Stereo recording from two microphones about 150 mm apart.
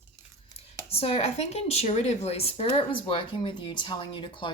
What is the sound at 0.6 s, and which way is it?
Speech, 40° left (ahead or behind).